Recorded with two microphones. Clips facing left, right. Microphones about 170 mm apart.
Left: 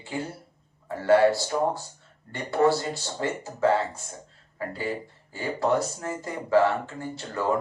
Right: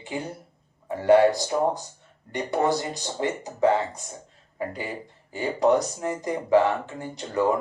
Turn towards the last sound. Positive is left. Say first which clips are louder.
# right 2 dB
turn(degrees=-15)  # may be behind; listen again after turning